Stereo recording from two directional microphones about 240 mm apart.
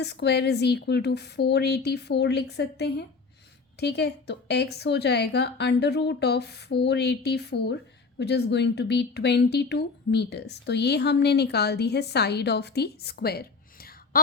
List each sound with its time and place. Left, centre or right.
0.0 s speech: left